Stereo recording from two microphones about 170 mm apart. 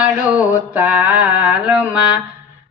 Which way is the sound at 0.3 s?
10° right (ahead or behind).